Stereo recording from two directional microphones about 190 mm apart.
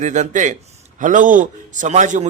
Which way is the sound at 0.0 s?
40° right (ahead or behind).